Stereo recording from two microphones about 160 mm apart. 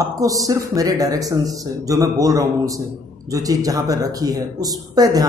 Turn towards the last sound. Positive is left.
turn(degrees=-25)  # may be behind; listen again after turning